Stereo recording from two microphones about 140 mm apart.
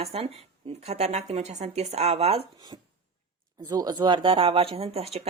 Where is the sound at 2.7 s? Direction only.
35° right (ahead or behind).